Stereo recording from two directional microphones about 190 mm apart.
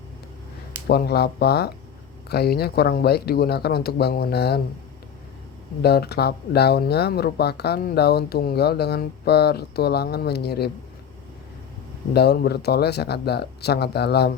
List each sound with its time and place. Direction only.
0.9 s speech: 55° left (ahead or behind)
5.8 s speech: 60° left (ahead or behind)
12.1 s speech: 60° left (ahead or behind)